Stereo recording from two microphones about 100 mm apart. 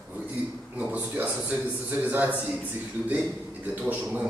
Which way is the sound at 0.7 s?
15° right (ahead or behind).